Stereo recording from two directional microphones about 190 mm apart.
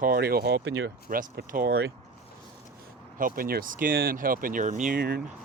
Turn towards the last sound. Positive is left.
turn(degrees=-55)  # may be behind; listen again after turning